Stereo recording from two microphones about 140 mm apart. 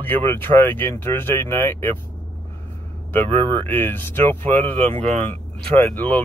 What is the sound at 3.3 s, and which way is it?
Speech, 40° right (ahead or behind).